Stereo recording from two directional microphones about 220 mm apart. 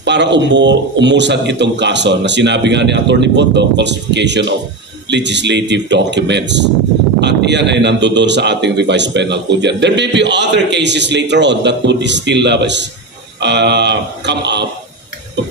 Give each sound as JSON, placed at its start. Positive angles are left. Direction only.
{"t": 0.0, "sound": "a man's voice", "side_deg": -50}